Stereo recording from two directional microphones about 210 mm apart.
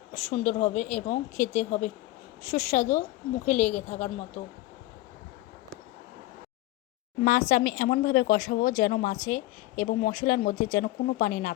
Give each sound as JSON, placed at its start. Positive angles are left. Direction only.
{"t": 0.1, "sound": "speech", "side_deg": 30}
{"t": 7.3, "sound": "speech", "side_deg": 40}